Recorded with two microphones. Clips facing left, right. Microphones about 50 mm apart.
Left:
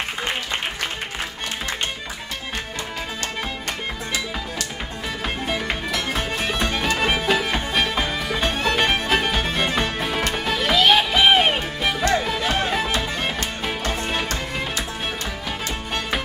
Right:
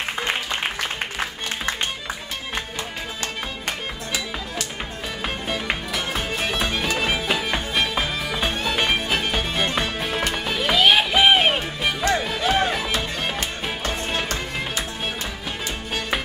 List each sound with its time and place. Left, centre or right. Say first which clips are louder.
5.7 s music: left 1 dB; centre
13.7 s music: left 3 dB; centre